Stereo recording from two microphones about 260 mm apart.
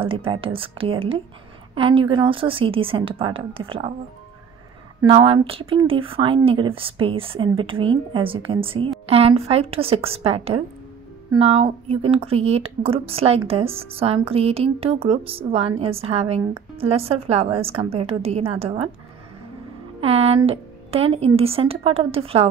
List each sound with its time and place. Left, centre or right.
0.0 s speech: centre
5.0 s speech: centre
20.0 s speech: right